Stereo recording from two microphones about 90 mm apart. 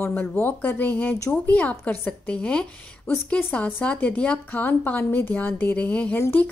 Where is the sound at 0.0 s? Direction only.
20° left (ahead or behind).